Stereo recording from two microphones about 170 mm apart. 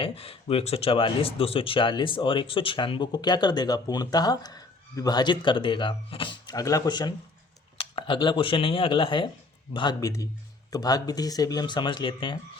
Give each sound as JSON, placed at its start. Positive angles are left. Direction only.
{"t": 0.0, "sound": "speech", "side_deg": 35}